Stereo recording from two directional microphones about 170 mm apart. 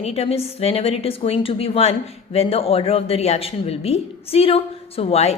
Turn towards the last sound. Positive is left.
turn(degrees=35)  # may be behind; listen again after turning